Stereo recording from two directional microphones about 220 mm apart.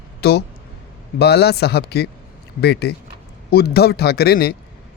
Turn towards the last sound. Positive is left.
turn(degrees=45)  # may be behind; listen again after turning